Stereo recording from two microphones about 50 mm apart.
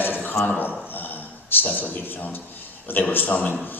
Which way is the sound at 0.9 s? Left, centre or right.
Left.